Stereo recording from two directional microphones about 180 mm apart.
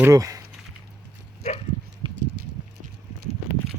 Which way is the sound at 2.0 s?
25° right (ahead or behind).